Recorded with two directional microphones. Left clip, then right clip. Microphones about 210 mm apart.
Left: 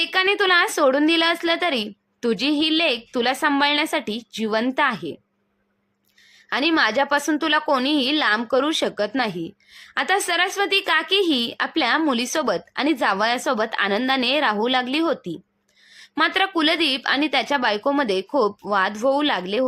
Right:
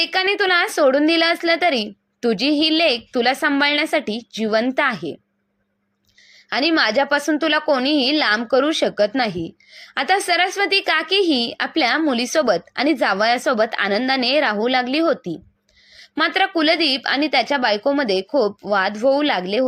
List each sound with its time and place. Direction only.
0.0 s a woman's voice: centre (ahead or behind)
6.5 s a woman's voice: 5° right (ahead or behind)